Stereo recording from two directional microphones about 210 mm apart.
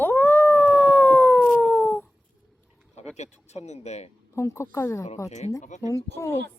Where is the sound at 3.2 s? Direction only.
30° left (ahead or behind).